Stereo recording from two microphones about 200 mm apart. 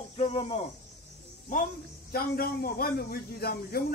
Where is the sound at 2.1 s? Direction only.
50° left (ahead or behind).